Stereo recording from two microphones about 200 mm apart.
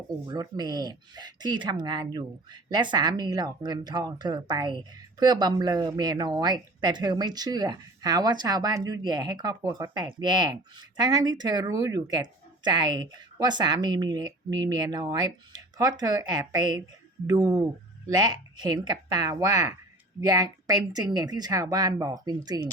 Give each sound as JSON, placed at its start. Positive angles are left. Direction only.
{"t": 0.3, "sound": "speech", "side_deg": -20}